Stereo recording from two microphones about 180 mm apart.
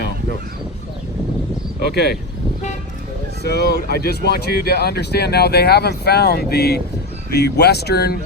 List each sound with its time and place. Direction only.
3.4 s speech: 65° left (ahead or behind)